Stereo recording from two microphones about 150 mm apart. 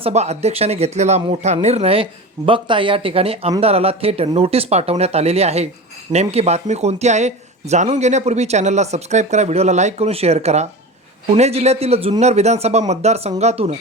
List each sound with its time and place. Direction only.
0.0 s speech: 45° right (ahead or behind)